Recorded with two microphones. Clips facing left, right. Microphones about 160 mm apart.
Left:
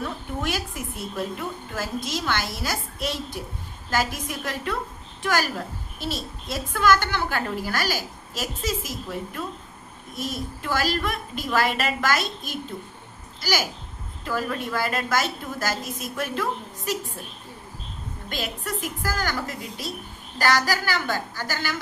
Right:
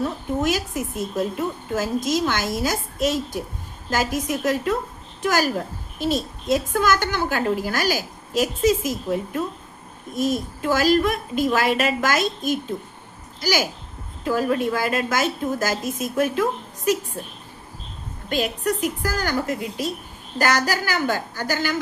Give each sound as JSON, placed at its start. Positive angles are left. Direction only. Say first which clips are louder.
{"t": 0.0, "sound": "a woman's voice", "louder": "right 6 dB", "side_deg": -45}
{"t": 18.3, "sound": "a woman's voice", "louder": "right 8 dB", "side_deg": -45}